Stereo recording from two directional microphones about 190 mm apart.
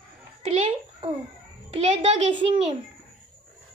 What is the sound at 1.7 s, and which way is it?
Speech, 35° right (ahead or behind).